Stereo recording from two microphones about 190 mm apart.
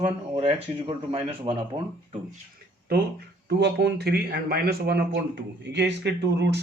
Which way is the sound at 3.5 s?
60° right (ahead or behind).